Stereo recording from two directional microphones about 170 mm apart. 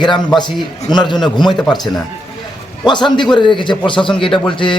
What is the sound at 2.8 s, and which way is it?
A man's voice, 25° left (ahead or behind).